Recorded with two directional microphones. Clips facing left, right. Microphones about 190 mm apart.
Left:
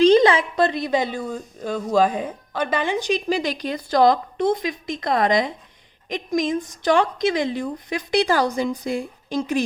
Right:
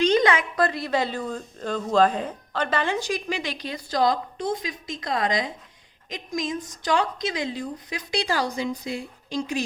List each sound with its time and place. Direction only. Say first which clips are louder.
0.0 s a woman's voice: left 6 dB; 30° left (ahead or behind); by 3.2 s 15° left (ahead or behind)
3.2 s a woman's voice: left 7 dB; 35° left (ahead or behind); by 9.6 s 50° left (ahead or behind)